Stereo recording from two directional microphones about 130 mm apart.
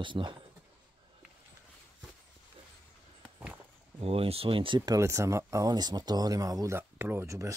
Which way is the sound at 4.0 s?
50° right (ahead or behind).